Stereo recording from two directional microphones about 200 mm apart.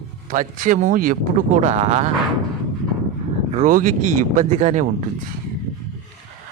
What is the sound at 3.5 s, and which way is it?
Speech, 40° right (ahead or behind).